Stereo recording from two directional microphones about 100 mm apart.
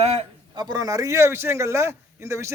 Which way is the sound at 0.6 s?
45° right (ahead or behind).